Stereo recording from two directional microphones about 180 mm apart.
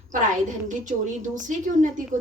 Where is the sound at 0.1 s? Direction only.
45° right (ahead or behind).